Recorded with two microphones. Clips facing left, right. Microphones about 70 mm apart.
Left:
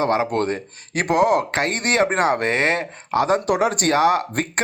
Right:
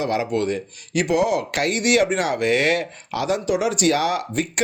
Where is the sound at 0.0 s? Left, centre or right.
Left.